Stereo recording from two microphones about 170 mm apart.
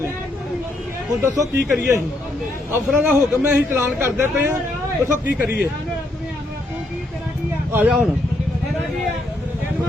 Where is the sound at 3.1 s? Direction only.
15° right (ahead or behind).